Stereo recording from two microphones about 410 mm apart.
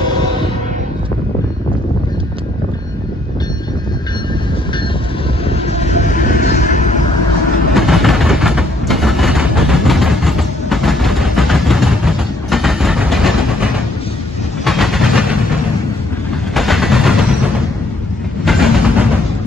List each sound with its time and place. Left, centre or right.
5.8 s vehicle: centre
7.7 s train: centre
16.5 s vehicle: centre
18.4 s train: centre